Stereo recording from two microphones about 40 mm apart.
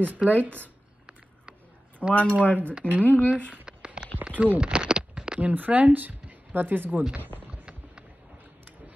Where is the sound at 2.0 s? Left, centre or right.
Left.